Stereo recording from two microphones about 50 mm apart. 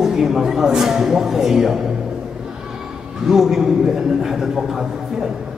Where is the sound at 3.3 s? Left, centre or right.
Centre.